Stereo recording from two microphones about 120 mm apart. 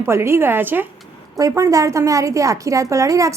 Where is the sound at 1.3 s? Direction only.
30° right (ahead or behind).